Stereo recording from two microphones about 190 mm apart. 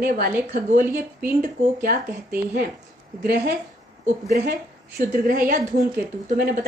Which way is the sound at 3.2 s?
60° right (ahead or behind).